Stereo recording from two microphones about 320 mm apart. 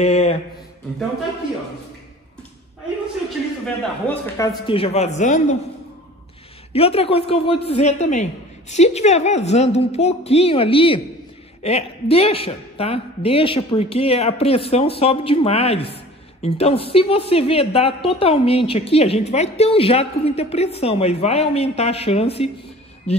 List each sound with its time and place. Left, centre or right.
0.0 s mantra: centre
3.6 s a man's voice: centre
4.6 s a woman's voice: centre
6.7 s a woman's voice: centre